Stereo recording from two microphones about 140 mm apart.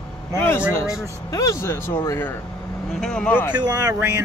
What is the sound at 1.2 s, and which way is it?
Speech, 25° left (ahead or behind).